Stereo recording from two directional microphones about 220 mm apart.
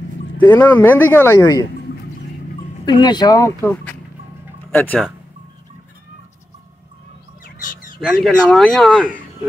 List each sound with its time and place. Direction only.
0.4 s speech: 10° left (ahead or behind)
2.8 s speech: 20° left (ahead or behind)
8.0 s speech: centre (ahead or behind)